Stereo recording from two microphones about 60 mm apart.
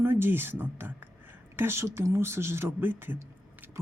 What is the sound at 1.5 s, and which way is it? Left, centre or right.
Speech, right.